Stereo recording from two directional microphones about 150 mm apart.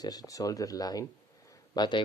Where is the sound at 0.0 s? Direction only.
25° left (ahead or behind).